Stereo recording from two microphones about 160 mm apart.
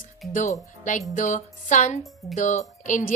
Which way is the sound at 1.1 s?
50° left (ahead or behind).